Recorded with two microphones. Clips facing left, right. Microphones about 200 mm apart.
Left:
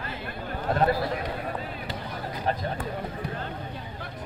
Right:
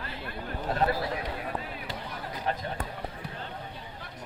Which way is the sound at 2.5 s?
35° left (ahead or behind).